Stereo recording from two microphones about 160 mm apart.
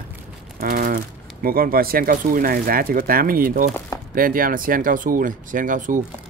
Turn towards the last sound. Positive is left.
turn(degrees=-55)  # may be behind; listen again after turning